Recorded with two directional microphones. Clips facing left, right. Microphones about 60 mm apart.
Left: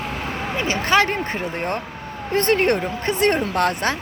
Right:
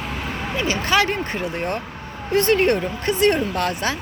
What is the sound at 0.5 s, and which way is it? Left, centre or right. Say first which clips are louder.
Speech: left 1 dB; left.